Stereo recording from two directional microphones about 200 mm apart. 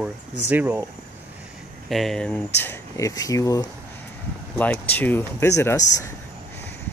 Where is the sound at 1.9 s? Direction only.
Centre (ahead or behind).